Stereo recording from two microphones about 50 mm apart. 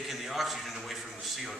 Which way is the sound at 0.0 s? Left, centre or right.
Centre.